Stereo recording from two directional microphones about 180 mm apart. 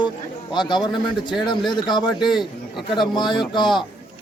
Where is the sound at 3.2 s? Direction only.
25° left (ahead or behind).